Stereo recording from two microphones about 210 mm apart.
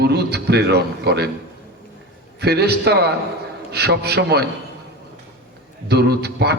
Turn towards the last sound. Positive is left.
turn(degrees=-50)  # may be behind; listen again after turning